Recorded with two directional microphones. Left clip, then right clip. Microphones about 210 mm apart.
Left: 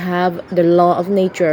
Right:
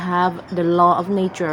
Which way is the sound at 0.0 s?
10° left (ahead or behind).